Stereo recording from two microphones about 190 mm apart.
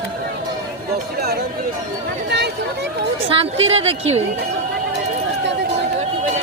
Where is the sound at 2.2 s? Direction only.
65° right (ahead or behind).